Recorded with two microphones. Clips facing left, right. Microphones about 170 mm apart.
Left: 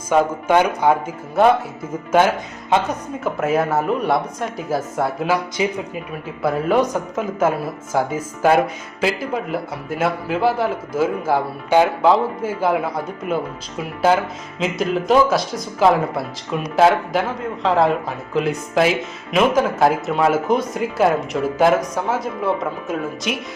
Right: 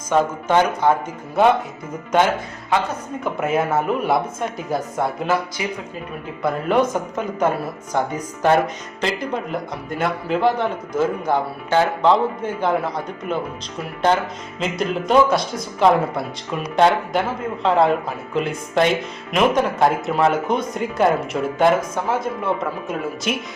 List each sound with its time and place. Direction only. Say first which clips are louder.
0.1 s speech: left 2 dB; 10° left (ahead or behind)
3.2 s speech: left 2 dB; centre (ahead or behind)
5.6 s speech: left 5 dB; 20° left (ahead or behind)
6.4 s speech: left 1 dB; centre (ahead or behind)